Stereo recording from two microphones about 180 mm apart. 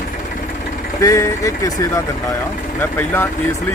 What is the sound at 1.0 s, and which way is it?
Speech, 15° left (ahead or behind).